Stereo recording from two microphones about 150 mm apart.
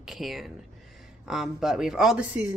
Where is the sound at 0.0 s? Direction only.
Centre (ahead or behind).